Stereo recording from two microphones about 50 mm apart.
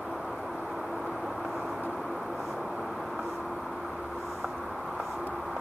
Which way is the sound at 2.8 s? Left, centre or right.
Centre.